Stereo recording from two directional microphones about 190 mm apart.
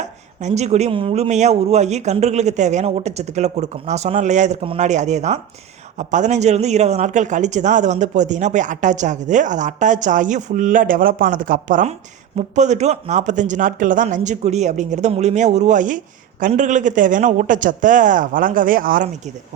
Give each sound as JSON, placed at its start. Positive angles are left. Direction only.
{"t": 0.0, "sound": "speech", "side_deg": -40}